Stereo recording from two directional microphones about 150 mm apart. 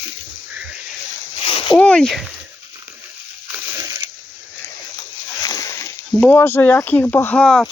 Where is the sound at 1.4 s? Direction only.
35° left (ahead or behind).